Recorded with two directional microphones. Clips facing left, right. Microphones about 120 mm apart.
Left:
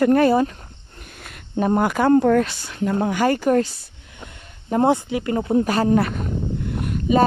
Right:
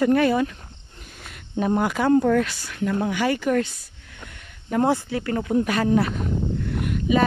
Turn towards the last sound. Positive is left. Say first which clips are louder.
# left 3 dB
turn(degrees=35)  # may be behind; listen again after turning